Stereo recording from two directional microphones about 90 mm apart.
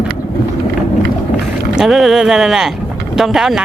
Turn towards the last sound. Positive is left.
turn(degrees=-5)  # may be behind; listen again after turning